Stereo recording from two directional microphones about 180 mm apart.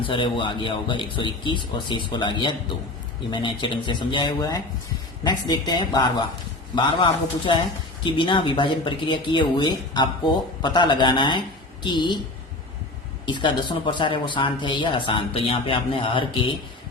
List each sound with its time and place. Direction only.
0.0 s speech: 30° left (ahead or behind)
13.2 s speech: 25° left (ahead or behind)